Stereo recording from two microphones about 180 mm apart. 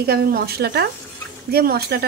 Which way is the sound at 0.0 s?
60° right (ahead or behind).